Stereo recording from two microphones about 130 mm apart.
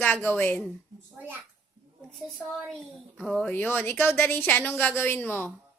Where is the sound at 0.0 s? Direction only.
10° left (ahead or behind).